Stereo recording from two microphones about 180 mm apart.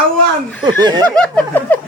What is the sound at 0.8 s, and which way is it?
Speech, 25° right (ahead or behind).